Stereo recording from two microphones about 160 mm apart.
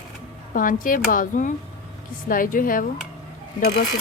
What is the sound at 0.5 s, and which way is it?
A woman's voice, 55° left (ahead or behind).